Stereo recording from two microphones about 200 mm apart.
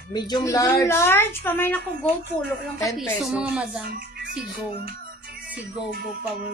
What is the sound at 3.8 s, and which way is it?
Music, 50° right (ahead or behind).